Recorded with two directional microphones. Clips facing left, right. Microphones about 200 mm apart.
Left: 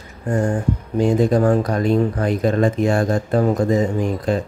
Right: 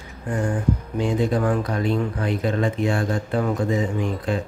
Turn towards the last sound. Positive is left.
turn(degrees=40)  # may be behind; listen again after turning